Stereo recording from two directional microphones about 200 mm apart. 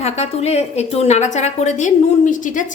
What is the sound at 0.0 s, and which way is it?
A woman's voice, 30° left (ahead or behind).